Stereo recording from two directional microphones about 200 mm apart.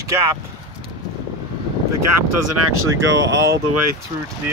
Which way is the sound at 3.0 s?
70° right (ahead or behind).